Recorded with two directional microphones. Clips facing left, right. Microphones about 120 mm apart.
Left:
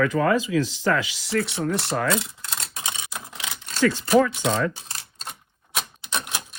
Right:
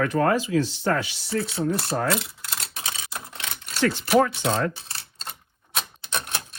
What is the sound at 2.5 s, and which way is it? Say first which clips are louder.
Typewriter: left 1 dB; 20° left (ahead or behind).